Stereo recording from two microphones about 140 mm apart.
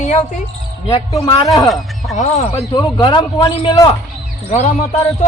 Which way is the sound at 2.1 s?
60° left (ahead or behind).